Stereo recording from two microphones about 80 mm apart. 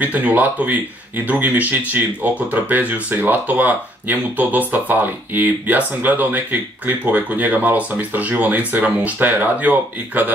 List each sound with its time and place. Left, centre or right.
0.0 s speech: right